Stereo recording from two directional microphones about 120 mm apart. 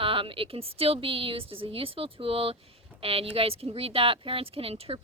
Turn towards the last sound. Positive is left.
turn(degrees=-50)  # may be behind; listen again after turning